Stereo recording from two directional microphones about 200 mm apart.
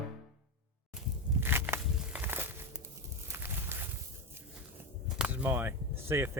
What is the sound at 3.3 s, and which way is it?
Walk, 10° right (ahead or behind).